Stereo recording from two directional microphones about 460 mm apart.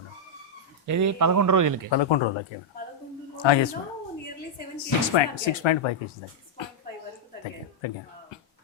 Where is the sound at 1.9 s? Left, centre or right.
Left.